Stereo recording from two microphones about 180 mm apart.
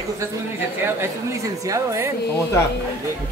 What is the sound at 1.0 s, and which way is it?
A woman's voice, 15° right (ahead or behind).